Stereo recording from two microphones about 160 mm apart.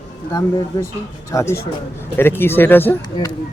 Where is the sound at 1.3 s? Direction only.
20° left (ahead or behind).